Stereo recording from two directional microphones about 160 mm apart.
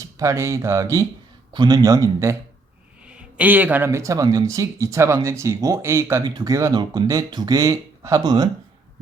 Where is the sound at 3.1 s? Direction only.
5° right (ahead or behind).